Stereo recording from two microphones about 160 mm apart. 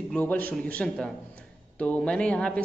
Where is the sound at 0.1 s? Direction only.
10° left (ahead or behind).